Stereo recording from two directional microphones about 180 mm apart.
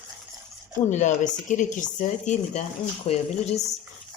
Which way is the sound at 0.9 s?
45° left (ahead or behind).